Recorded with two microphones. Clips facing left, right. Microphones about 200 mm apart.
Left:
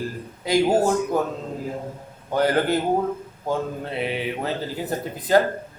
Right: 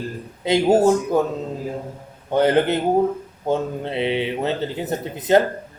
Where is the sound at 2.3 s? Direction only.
25° right (ahead or behind).